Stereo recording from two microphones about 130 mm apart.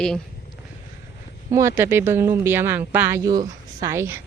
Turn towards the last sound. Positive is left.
turn(degrees=-20)  # may be behind; listen again after turning